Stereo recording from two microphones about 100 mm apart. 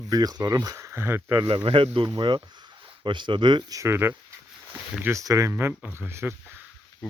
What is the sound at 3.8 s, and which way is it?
Speech, 25° right (ahead or behind).